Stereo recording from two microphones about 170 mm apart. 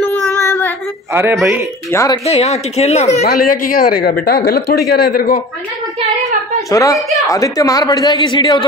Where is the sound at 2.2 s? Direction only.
40° left (ahead or behind).